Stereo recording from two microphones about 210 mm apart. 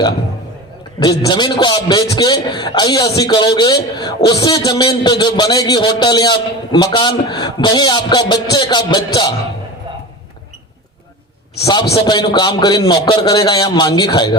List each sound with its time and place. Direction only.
0.9 s a man's voice: 20° left (ahead or behind)
11.6 s a man's voice: 20° left (ahead or behind)